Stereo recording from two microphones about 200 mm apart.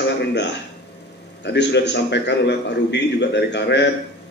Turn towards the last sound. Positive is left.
turn(degrees=60)  # may be behind; listen again after turning